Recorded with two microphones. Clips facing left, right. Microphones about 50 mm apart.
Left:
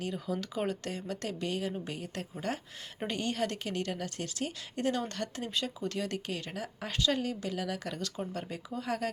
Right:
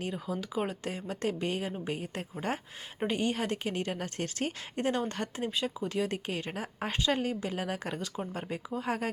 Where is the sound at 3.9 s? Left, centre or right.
Right.